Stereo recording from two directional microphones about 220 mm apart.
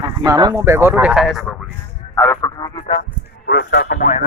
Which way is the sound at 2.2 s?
10° left (ahead or behind).